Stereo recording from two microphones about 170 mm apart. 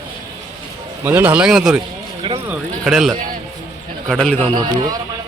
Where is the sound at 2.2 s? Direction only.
35° right (ahead or behind).